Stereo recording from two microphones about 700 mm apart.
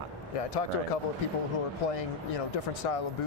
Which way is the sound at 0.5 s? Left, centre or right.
Left.